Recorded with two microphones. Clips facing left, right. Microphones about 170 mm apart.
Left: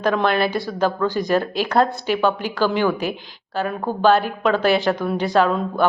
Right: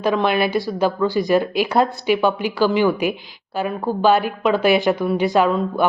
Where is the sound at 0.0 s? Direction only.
5° right (ahead or behind).